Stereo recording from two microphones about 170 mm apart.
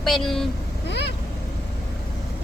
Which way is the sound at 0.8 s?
90° left.